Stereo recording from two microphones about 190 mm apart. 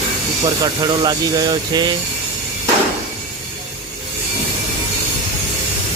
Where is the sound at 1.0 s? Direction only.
20° right (ahead or behind).